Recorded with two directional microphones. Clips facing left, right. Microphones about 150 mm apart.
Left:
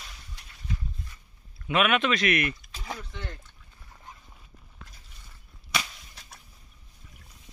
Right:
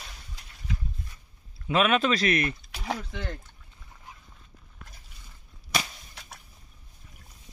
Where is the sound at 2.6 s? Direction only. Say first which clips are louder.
Right 6 dB; 75° right (ahead or behind).